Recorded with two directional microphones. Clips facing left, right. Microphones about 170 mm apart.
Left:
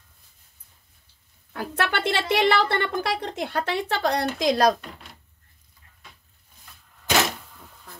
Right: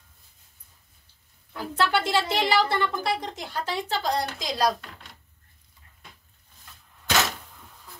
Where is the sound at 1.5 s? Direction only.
60° left (ahead or behind).